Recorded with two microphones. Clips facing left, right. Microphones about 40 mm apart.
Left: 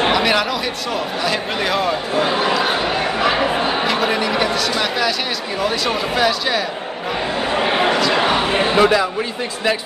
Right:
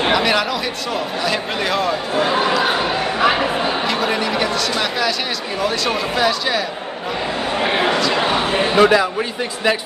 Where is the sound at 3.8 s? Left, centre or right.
Centre.